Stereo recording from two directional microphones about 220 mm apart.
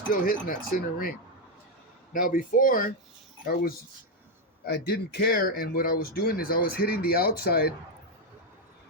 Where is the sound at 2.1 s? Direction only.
40° left (ahead or behind).